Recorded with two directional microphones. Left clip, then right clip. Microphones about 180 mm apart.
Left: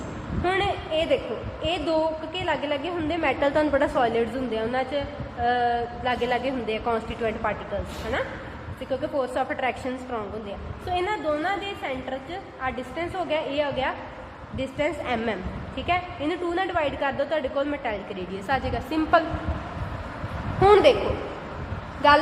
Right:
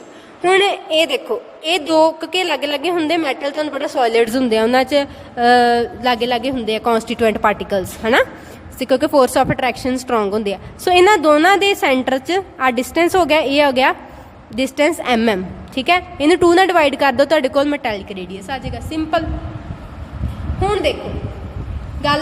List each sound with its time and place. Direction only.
0.4 s a woman's voice: 60° right (ahead or behind)
8.8 s a woman's voice: 70° right (ahead or behind); by 18.3 s 40° right (ahead or behind)
18.4 s a woman's voice: 20° right (ahead or behind)
20.6 s a woman's voice: 10° right (ahead or behind)